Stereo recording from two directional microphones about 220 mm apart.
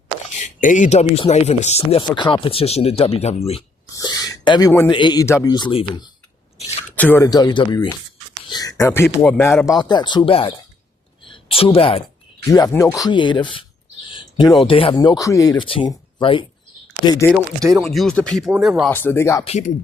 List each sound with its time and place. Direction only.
0.3 s speech: 35° left (ahead or behind)
3.9 s a sound: 15° left (ahead or behind)
4.9 s speech: 20° left (ahead or behind)
6.6 s a sound: 30° left (ahead or behind)
6.9 s a woman's voice: 10° left (ahead or behind); by 12.0 s 25° left (ahead or behind)
12.5 s speech: 15° left (ahead or behind)
14.1 s a sound: 20° left (ahead or behind)
14.6 s speech: 25° left (ahead or behind)
17.7 s speech: centre (ahead or behind)
18.9 s speech: 10° left (ahead or behind)
19.5 s speech: 30° left (ahead or behind)